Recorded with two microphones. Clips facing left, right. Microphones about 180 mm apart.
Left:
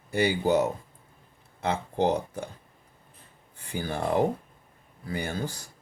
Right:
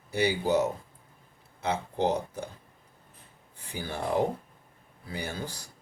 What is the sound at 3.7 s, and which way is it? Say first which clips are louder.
Speech: left 3 dB; 55° left (ahead or behind).